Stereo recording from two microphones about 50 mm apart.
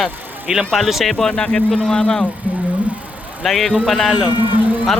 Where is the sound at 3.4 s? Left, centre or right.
Centre.